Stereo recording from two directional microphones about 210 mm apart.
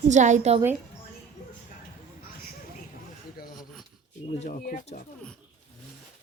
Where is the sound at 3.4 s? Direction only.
45° left (ahead or behind).